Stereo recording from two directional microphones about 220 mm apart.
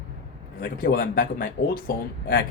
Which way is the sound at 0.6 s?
40° left (ahead or behind).